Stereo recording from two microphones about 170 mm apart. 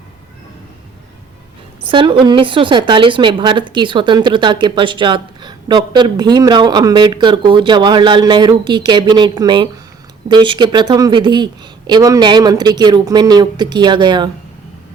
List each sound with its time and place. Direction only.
1.8 s a woman's voice: 30° right (ahead or behind)